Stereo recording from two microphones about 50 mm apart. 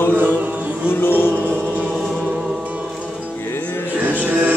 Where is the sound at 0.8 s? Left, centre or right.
Left.